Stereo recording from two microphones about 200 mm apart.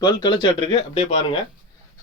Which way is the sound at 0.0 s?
25° left (ahead or behind).